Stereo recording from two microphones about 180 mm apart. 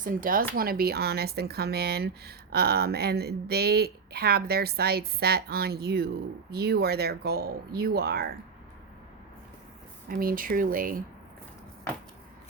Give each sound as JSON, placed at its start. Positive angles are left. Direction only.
{"t": 0.0, "sound": "speech", "side_deg": -50}
{"t": 10.1, "sound": "speech", "side_deg": -55}